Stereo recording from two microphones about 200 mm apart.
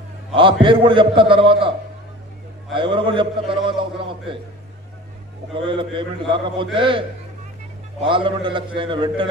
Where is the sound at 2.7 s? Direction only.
25° right (ahead or behind).